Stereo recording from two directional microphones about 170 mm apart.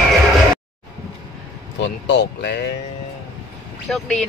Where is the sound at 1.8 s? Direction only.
90° left.